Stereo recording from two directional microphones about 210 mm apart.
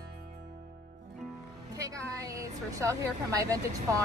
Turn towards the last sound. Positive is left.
turn(degrees=-15)  # may be behind; listen again after turning